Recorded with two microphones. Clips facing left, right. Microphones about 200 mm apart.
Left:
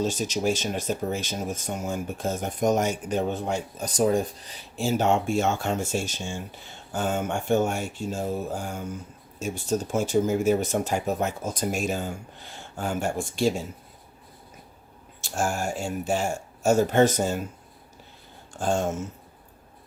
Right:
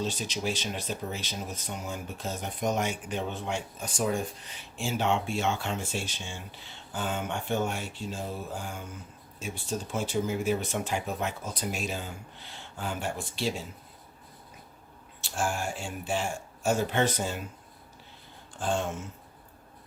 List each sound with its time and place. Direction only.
0.0 s speech: 45° left (ahead or behind)
15.2 s speech: 45° left (ahead or behind)
18.5 s speech: 45° left (ahead or behind)